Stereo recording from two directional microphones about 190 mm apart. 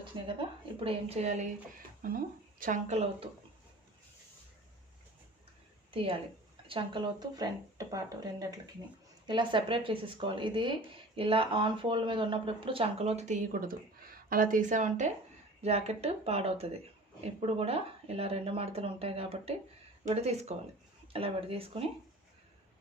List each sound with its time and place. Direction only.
0.0 s speech: 25° right (ahead or behind)
2.0 s speech: 50° right (ahead or behind)
5.9 s a woman's voice: 30° right (ahead or behind)